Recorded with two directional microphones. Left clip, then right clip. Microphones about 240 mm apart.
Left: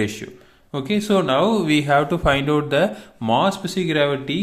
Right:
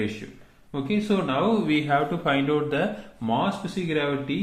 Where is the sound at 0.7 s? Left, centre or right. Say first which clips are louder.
Left 6 dB; left.